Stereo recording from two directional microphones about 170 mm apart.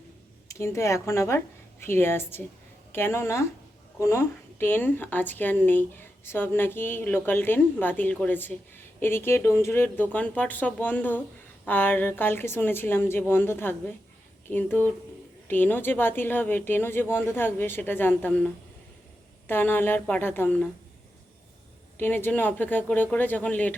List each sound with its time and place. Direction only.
0.4 s a woman's voice: 15° left (ahead or behind)
21.9 s a woman's voice: 10° left (ahead or behind)